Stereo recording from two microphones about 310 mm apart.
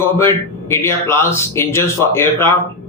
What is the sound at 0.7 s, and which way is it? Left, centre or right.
A man's voice, centre.